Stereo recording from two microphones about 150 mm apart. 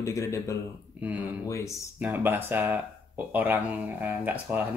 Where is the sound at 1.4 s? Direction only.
20° left (ahead or behind).